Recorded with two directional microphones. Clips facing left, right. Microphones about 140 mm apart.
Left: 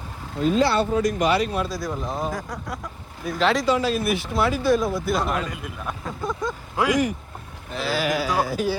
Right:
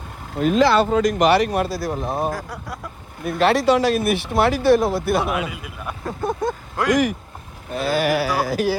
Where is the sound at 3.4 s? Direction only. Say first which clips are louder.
Right 4 dB; 65° right (ahead or behind).